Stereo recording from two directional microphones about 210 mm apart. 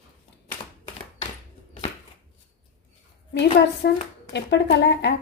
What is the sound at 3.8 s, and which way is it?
Speech, 55° left (ahead or behind).